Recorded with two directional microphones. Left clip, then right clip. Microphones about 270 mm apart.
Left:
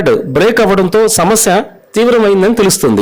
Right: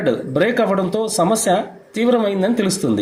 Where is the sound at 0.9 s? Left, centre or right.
Left.